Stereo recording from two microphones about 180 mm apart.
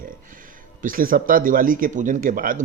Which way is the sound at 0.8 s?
50° right (ahead or behind).